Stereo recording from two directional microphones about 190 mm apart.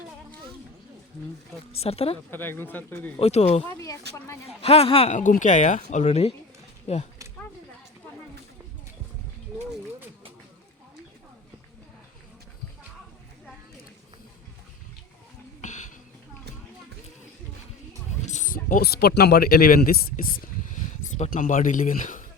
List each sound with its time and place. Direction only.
1.7 s speech: 30° left (ahead or behind)
2.3 s speech: 10° left (ahead or behind)
3.2 s speech: 30° left (ahead or behind)
3.7 s speech: 15° left (ahead or behind)
4.6 s speech: 30° left (ahead or behind)
9.5 s a sound: 5° right (ahead or behind)
15.6 s a sound: 40° left (ahead or behind)
18.3 s speech: 40° left (ahead or behind)